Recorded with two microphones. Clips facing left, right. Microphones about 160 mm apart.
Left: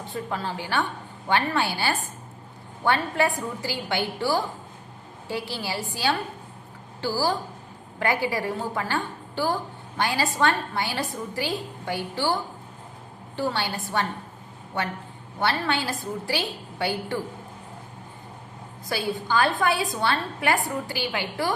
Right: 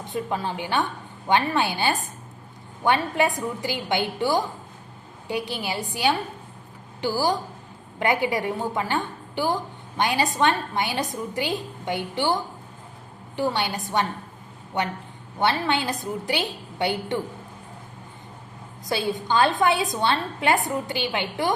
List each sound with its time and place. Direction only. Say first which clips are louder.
0.1 s a woman's voice: right 3 dB; 15° right (ahead or behind)
18.9 s a woman's voice: right 2 dB; 20° right (ahead or behind)